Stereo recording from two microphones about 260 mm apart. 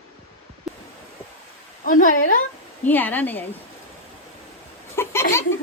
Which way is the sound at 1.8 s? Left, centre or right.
Left.